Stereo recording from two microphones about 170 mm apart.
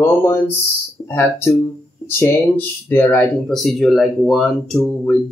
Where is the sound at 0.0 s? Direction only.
15° left (ahead or behind).